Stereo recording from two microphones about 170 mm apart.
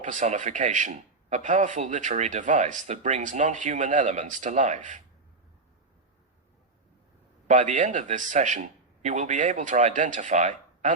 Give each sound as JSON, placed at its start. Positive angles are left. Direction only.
{"t": 0.0, "sound": "a man's voice", "side_deg": -45}
{"t": 7.4, "sound": "a man's voice", "side_deg": -45}